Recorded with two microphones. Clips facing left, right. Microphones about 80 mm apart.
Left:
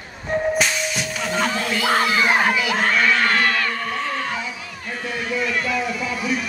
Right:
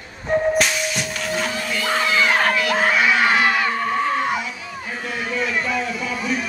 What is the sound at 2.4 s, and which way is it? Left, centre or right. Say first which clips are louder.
Crowd: right 1 dB; centre.